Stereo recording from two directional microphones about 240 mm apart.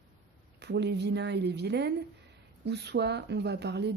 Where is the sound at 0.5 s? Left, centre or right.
Right.